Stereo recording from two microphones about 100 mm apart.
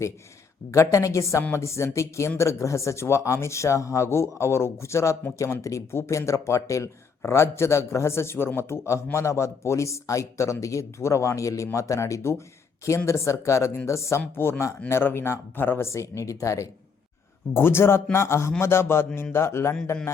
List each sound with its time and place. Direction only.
0.7 s a man's voice: 30° left (ahead or behind)